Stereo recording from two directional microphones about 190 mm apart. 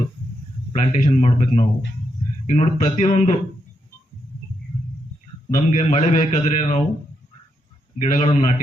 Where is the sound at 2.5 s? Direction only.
30° left (ahead or behind).